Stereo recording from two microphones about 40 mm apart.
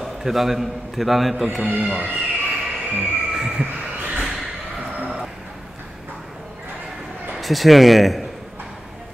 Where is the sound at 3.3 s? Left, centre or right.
Centre.